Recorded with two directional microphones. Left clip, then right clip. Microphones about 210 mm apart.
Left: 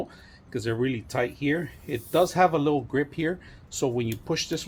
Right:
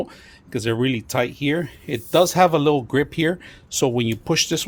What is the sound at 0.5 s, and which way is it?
Speech, 45° right (ahead or behind).